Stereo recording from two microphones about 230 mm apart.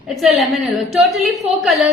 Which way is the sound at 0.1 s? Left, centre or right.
Centre.